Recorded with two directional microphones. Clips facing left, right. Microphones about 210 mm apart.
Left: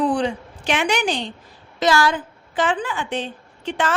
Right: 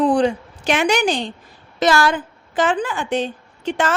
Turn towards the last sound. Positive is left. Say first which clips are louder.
# right 3 dB
turn(degrees=-45)  # may be behind; listen again after turning